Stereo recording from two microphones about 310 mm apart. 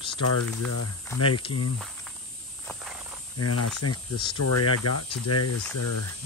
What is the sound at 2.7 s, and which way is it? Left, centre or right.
Walk, centre.